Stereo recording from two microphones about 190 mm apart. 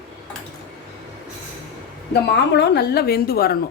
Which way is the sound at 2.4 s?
60° left (ahead or behind).